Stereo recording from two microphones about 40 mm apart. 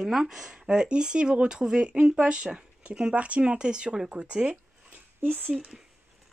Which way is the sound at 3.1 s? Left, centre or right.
Right.